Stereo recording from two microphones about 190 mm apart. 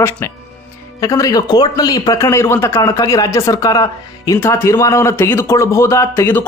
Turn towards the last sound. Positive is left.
turn(degrees=10)  # may be behind; listen again after turning